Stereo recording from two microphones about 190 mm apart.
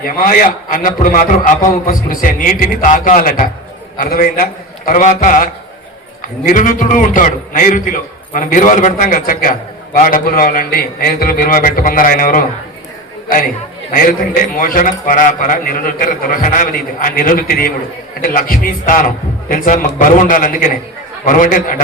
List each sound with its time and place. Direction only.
0.2 s a man's voice: 45° left (ahead or behind)
13.9 s a man's voice: 45° left (ahead or behind)